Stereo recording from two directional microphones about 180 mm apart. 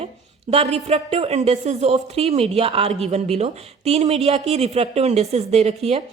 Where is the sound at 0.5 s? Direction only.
35° right (ahead or behind).